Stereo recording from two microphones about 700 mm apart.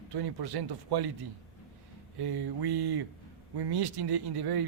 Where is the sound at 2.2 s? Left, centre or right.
Right.